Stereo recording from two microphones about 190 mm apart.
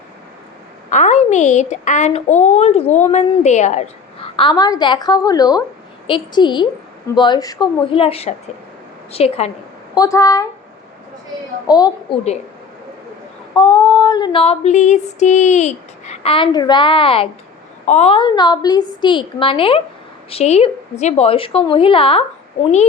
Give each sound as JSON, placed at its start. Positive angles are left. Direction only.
{"t": 0.9, "sound": "a woman's voice", "side_deg": 40}
{"t": 3.1, "sound": "female singing", "side_deg": 35}
{"t": 9.1, "sound": "a woman's voice", "side_deg": 30}
{"t": 9.9, "sound": "speech", "side_deg": 20}
{"t": 11.7, "sound": "female singing", "side_deg": 20}
{"t": 13.6, "sound": "female singing", "side_deg": 25}